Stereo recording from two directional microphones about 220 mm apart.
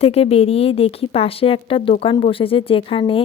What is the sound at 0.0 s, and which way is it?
Speech, 25° left (ahead or behind).